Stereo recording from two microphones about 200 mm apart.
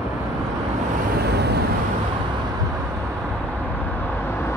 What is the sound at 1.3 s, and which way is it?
Vehicle, 55° right (ahead or behind).